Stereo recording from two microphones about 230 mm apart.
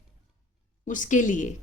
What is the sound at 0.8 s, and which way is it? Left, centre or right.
Speech, left.